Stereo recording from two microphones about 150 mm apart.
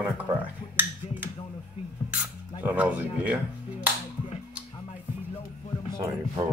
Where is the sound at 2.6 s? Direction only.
10° right (ahead or behind).